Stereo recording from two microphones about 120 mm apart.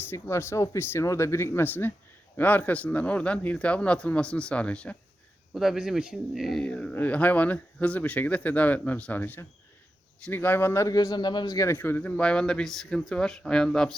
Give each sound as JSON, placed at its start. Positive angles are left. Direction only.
{"t": 0.1, "sound": "speech", "side_deg": 20}
{"t": 5.5, "sound": "speech", "side_deg": -5}
{"t": 10.9, "sound": "speech", "side_deg": 35}
{"t": 11.7, "sound": "speech", "side_deg": 15}